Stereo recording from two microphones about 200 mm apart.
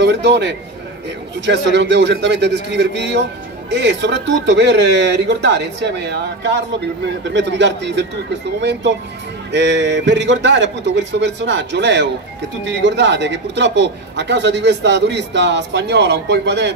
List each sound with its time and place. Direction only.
0.0 s speech: 60° right (ahead or behind)